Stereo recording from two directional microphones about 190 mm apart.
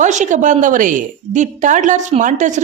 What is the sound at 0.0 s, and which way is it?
A woman's voice, 40° right (ahead or behind).